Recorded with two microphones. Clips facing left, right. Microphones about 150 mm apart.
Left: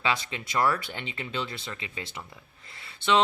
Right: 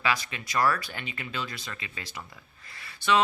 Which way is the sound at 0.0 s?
25° left (ahead or behind).